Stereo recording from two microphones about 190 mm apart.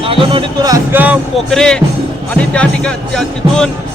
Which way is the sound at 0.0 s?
30° right (ahead or behind).